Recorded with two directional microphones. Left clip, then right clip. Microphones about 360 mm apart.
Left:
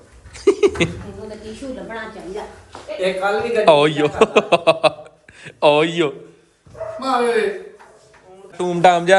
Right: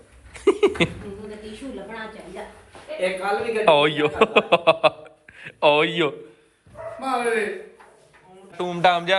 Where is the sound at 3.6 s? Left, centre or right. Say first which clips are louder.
Left 4 dB; centre.